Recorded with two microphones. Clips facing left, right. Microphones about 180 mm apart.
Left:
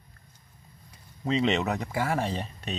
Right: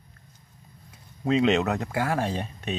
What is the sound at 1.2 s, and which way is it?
Speech, centre (ahead or behind).